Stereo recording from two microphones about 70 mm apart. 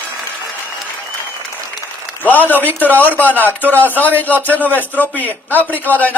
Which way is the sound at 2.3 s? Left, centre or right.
Left.